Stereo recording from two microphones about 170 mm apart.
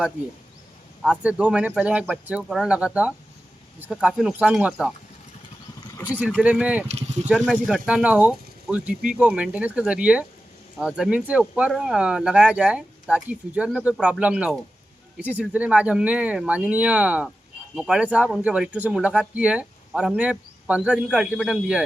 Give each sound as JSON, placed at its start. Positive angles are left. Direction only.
{"t": 1.0, "sound": "speech", "side_deg": -5}
{"t": 6.4, "sound": "speech", "side_deg": -5}
{"t": 6.8, "sound": "a sound", "side_deg": -40}
{"t": 7.9, "sound": "speech", "side_deg": -5}